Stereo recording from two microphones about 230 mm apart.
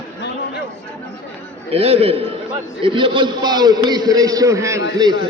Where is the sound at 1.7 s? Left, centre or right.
Right.